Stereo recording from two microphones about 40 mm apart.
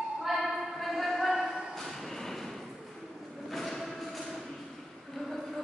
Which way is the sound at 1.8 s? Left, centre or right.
Centre.